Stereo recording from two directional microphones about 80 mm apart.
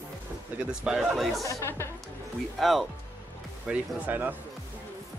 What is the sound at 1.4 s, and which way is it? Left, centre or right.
Speech, left.